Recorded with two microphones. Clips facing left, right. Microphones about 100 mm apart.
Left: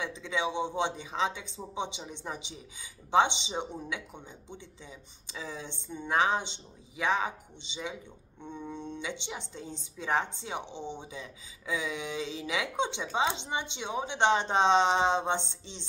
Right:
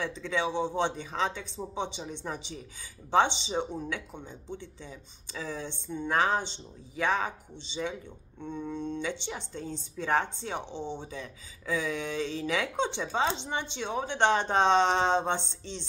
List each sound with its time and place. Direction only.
0.0 s speech: 15° left (ahead or behind)
4.8 s speech: 15° left (ahead or behind)